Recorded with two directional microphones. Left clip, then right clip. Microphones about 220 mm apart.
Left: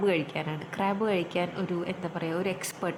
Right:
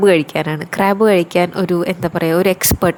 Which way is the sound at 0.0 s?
45° right (ahead or behind).